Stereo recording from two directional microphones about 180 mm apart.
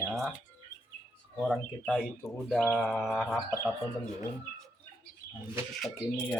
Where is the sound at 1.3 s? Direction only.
Centre (ahead or behind).